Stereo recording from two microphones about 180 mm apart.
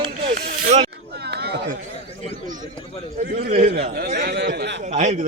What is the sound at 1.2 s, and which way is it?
Chatter, 65° right (ahead or behind).